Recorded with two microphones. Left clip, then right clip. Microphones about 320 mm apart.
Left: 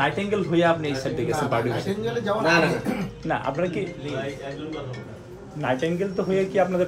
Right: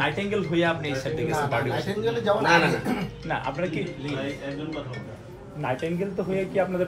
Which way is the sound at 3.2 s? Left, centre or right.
Left.